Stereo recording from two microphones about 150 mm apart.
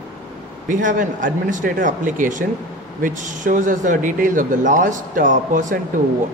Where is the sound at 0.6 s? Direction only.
60° right (ahead or behind).